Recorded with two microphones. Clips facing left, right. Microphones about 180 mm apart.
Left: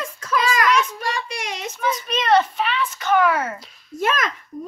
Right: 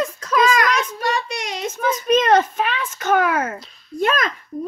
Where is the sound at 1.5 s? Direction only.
45° right (ahead or behind).